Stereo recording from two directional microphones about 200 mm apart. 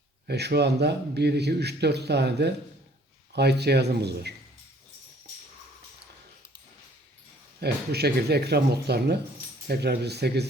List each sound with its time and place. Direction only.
0.3 s speech: 55° right (ahead or behind)
7.6 s speech: 55° right (ahead or behind)